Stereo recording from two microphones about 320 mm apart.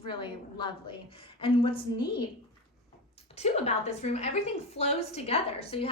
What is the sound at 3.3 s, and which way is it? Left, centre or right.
A woman's voice, centre.